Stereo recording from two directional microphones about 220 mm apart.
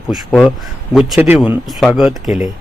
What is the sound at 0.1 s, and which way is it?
A man's voice, centre (ahead or behind).